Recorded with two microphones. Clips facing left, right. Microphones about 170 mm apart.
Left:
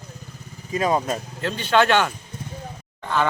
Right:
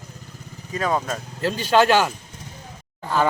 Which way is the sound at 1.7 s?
5° right (ahead or behind).